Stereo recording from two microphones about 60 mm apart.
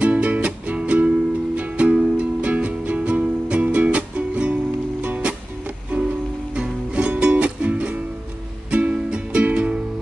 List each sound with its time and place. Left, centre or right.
0.0 s music: right
6.5 s music: centre